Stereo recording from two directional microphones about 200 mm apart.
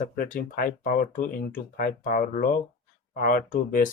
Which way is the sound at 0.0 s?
45° left (ahead or behind).